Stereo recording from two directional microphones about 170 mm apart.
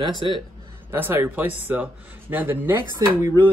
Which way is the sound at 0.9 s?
10° right (ahead or behind).